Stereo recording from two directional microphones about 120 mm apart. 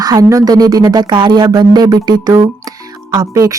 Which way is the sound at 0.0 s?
30° right (ahead or behind).